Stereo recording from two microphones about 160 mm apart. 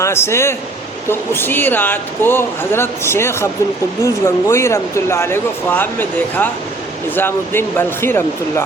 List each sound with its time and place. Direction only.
0.0 s speech: 15° left (ahead or behind)